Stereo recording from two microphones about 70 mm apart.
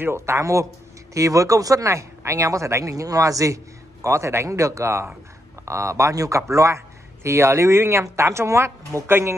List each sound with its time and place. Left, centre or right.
0.0 s speech: right